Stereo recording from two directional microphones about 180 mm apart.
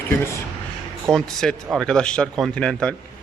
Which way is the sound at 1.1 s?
Centre (ahead or behind).